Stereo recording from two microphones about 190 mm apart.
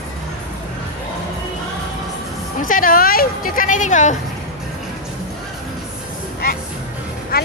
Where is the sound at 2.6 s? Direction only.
45° left (ahead or behind).